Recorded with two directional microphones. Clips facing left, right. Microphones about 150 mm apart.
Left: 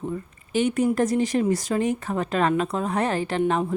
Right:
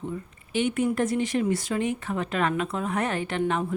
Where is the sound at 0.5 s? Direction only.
40° left (ahead or behind).